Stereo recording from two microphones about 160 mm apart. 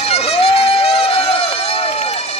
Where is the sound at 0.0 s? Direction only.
40° left (ahead or behind).